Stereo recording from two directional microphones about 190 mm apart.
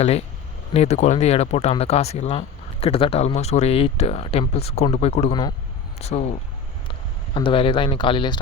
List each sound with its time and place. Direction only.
0.0 s speech: 35° left (ahead or behind)
7.3 s speech: 25° left (ahead or behind)